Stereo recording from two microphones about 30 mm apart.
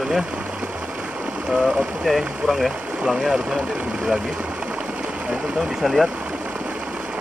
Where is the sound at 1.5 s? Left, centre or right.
Right.